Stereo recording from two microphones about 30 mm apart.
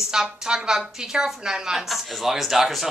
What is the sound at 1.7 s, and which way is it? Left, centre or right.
A woman's voice, centre.